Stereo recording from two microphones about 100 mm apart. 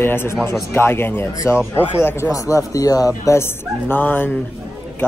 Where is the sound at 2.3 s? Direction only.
35° left (ahead or behind).